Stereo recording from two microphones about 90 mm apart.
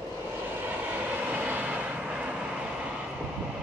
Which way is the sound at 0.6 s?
20° right (ahead or behind).